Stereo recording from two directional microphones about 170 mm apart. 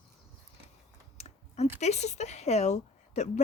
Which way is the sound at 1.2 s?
40° left (ahead or behind).